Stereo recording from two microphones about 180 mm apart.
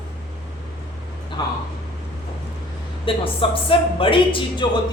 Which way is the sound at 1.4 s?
20° left (ahead or behind).